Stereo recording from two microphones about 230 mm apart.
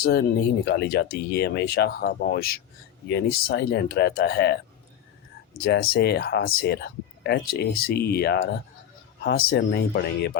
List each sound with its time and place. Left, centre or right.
0.0 s speech: left
5.6 s speech: left